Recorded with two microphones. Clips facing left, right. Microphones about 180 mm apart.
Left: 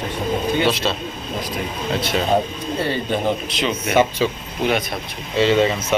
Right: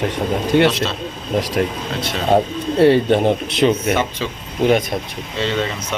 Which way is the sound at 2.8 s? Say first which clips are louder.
Right 12 dB; 70° right (ahead or behind).